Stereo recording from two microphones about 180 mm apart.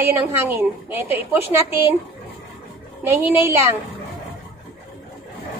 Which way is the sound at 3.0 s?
10° right (ahead or behind).